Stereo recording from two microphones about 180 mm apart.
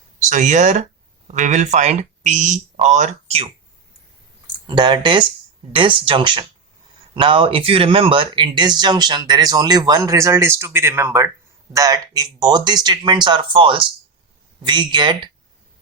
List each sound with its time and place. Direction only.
0.2 s speech: 45° right (ahead or behind)
4.6 s speech: 25° right (ahead or behind)